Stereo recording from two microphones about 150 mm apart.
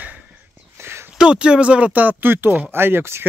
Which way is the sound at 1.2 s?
5° right (ahead or behind).